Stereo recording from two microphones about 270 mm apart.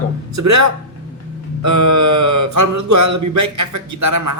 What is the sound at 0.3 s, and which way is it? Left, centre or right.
Speech, right.